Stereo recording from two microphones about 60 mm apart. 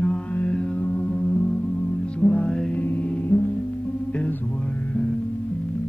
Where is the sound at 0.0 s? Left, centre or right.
Left.